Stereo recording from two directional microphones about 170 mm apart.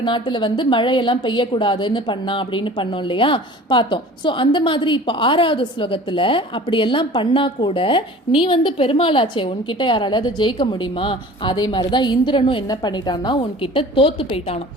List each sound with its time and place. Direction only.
0.0 s a woman's voice: 30° left (ahead or behind)